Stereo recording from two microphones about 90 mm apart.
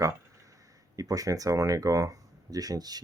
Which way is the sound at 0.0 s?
40° right (ahead or behind).